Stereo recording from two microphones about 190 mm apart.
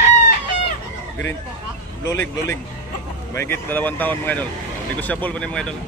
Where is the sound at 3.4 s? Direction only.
10° left (ahead or behind).